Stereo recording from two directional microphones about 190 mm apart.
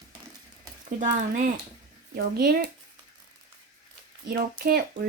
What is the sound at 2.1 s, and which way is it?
Speech, 55° right (ahead or behind).